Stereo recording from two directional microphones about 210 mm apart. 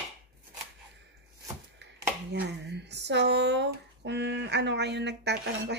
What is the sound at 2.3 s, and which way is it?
Speech, 50° right (ahead or behind).